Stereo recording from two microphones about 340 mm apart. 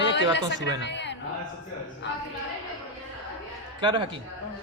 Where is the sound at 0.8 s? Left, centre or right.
Left.